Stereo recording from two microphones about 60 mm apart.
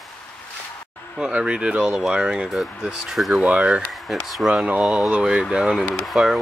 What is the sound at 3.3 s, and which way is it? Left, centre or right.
Speech, right.